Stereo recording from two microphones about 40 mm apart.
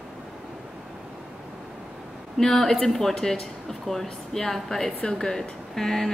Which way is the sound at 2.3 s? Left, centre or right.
Centre.